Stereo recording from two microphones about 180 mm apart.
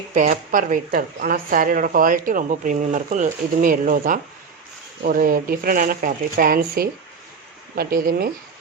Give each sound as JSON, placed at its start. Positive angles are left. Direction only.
{"t": 0.1, "sound": "speech", "side_deg": -45}